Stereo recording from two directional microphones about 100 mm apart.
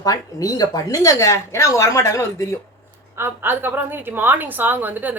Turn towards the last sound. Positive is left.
turn(degrees=-15)  # may be behind; listen again after turning